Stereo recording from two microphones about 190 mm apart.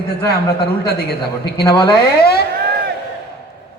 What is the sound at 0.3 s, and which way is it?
Speech, 55° left (ahead or behind).